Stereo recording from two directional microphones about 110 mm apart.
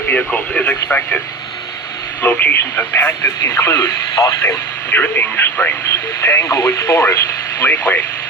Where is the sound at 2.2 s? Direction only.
20° left (ahead or behind).